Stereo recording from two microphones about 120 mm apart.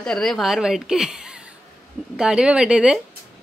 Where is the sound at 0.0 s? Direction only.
5° left (ahead or behind).